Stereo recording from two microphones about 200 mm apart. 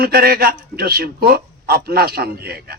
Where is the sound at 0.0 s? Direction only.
50° right (ahead or behind).